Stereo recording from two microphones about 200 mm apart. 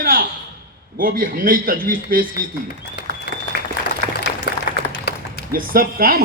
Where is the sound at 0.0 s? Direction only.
45° right (ahead or behind).